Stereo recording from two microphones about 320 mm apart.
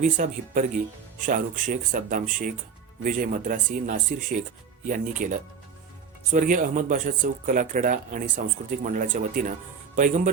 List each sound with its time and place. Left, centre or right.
0.0 s speech: right